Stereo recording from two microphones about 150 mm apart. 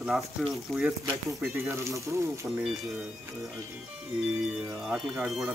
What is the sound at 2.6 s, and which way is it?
Speech, centre (ahead or behind).